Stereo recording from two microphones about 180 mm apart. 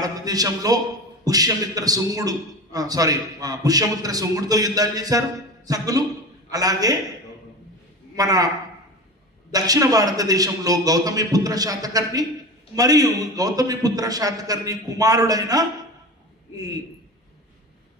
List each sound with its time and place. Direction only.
0.0 s a man's voice: 20° right (ahead or behind)
8.2 s a man's voice: 20° right (ahead or behind)
9.5 s a man's voice: 20° right (ahead or behind)